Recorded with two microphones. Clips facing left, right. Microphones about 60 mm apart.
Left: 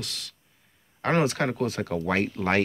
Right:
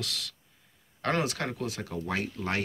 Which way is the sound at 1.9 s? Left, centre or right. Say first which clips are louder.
Left 7 dB; left.